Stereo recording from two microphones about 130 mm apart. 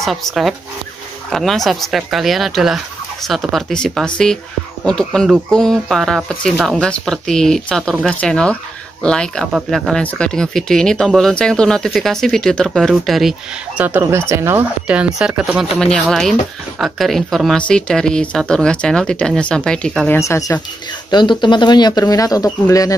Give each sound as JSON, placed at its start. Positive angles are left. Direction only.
{"t": 0.0, "sound": "speech", "side_deg": 0}
{"t": 13.8, "sound": "speech", "side_deg": -15}
{"t": 14.9, "sound": "speech", "side_deg": -5}
{"t": 15.8, "sound": "speech", "side_deg": 5}
{"t": 20.2, "sound": "speech", "side_deg": 25}
{"t": 21.1, "sound": "speech", "side_deg": 35}